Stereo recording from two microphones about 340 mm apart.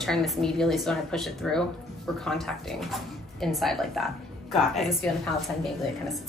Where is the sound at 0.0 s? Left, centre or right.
Centre.